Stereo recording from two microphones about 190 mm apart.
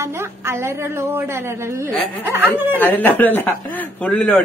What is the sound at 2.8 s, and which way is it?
Speech, 10° left (ahead or behind).